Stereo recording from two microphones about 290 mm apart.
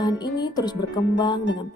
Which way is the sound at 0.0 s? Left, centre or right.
Centre.